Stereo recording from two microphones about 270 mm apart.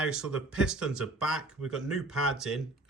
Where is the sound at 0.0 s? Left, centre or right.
Centre.